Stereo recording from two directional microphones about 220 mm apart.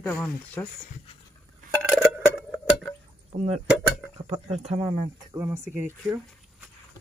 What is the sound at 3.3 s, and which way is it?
Speech, 30° right (ahead or behind).